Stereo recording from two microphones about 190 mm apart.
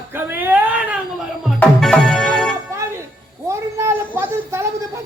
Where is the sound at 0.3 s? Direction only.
10° right (ahead or behind).